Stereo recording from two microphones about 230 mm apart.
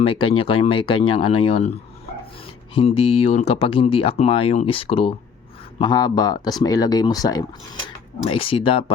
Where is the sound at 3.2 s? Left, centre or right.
Left.